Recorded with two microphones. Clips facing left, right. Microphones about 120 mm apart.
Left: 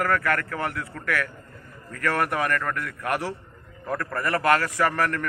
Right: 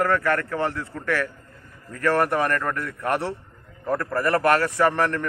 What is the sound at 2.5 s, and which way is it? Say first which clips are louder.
A man's voice: right 2 dB; 25° right (ahead or behind).